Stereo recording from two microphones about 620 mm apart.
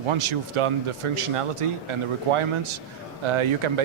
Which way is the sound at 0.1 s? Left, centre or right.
Right.